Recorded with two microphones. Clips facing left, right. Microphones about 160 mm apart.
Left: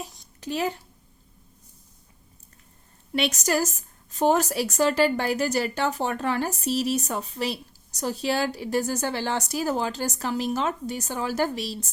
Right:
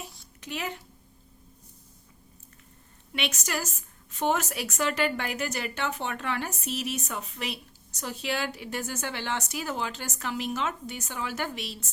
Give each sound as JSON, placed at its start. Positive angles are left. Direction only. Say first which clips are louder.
{"t": 0.3, "sound": "a child's voice", "louder": "left 8 dB", "side_deg": 35}
{"t": 3.1, "sound": "a woman's voice", "louder": "left 8 dB", "side_deg": 40}